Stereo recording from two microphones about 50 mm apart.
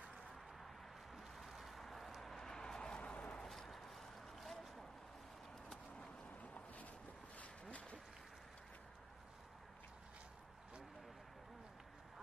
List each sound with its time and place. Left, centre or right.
1.1 s vehicle: centre; by 3.4 s left
3.4 s vehicle: centre
5.9 s boat: left
7.3 s a sound: left